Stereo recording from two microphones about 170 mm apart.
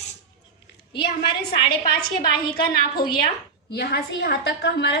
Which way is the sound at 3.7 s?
80° left.